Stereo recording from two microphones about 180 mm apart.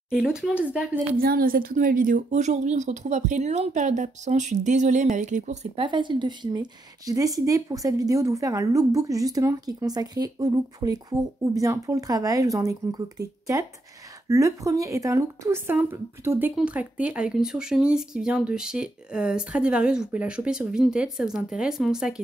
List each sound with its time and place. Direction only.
0.1 s a woman's voice: 5° right (ahead or behind)
1.1 s speech: 55° right (ahead or behind); by 5.9 s 40° right (ahead or behind)
5.9 s a woman's voice: 25° right (ahead or behind); by 22.2 s 5° right (ahead or behind)